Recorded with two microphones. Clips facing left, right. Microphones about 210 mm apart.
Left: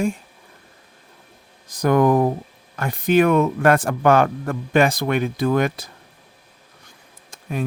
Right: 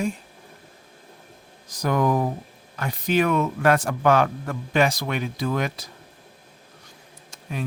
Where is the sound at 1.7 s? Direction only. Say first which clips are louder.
Left 6 dB; 55° left (ahead or behind).